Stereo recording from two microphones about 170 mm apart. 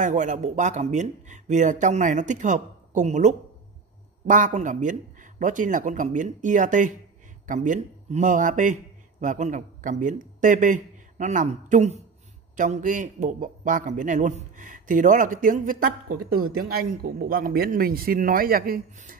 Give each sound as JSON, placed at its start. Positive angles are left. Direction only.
{"t": 0.0, "sound": "a man's voice", "side_deg": -50}